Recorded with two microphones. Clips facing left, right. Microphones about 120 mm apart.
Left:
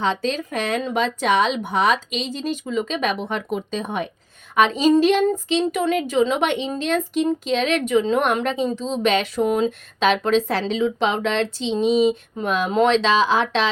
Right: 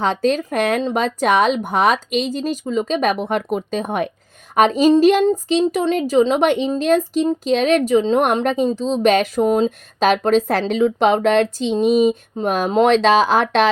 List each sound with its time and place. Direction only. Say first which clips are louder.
0.0 s speech: right 5 dB; 45° right (ahead or behind)
4.5 s speech: right 3 dB; 40° right (ahead or behind)